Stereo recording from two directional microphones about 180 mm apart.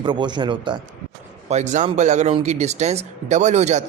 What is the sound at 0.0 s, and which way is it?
Speech, 25° right (ahead or behind).